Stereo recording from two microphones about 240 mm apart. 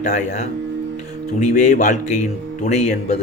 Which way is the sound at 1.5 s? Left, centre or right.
Left.